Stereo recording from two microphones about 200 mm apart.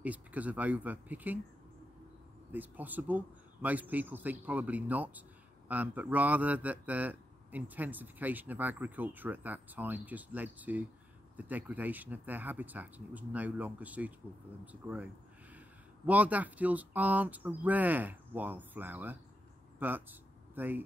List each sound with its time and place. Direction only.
0.0 s a man's voice: 5° right (ahead or behind)
2.5 s a man's voice: 10° right (ahead or behind)
16.1 s a man's voice: 10° right (ahead or behind)